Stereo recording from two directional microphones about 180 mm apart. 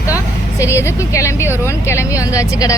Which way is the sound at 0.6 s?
15° left (ahead or behind).